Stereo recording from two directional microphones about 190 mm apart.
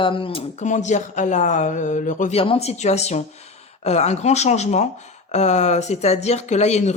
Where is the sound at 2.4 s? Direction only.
30° left (ahead or behind).